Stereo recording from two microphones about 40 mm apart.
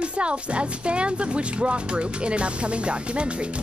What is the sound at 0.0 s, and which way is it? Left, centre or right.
Speech, right.